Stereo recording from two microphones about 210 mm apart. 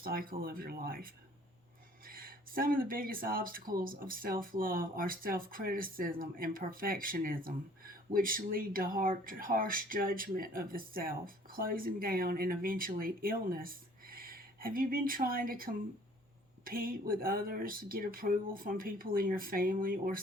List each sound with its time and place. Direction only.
0.0 s speech: 45° right (ahead or behind)